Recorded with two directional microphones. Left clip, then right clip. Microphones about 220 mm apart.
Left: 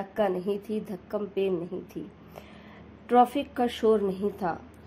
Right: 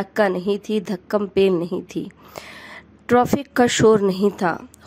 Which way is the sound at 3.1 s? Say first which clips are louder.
Right 4 dB; 30° right (ahead or behind).